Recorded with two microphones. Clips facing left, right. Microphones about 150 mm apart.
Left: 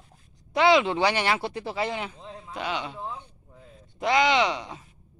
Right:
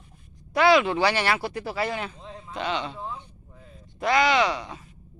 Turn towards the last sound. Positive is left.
turn(degrees=20)  # may be behind; listen again after turning